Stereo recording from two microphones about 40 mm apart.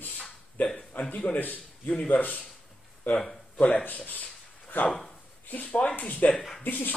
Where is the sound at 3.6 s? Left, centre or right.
Left.